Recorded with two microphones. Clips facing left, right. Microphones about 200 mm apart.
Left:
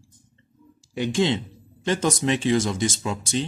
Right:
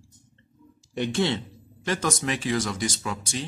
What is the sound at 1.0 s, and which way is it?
Speech, 15° left (ahead or behind).